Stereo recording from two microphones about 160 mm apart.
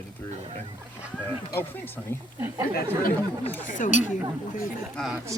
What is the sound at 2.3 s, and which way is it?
Speech, 15° right (ahead or behind).